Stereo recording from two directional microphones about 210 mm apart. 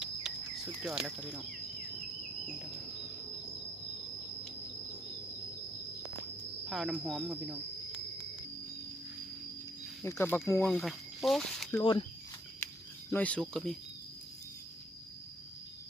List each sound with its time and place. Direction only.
0.0 s a sound: 5° right (ahead or behind)
0.8 s speech: 5° right (ahead or behind)
6.7 s speech: centre (ahead or behind)
10.0 s speech: 10° left (ahead or behind)
10.7 s speech: centre (ahead or behind)
11.8 s speech: 25° left (ahead or behind)
13.1 s speech: 5° left (ahead or behind)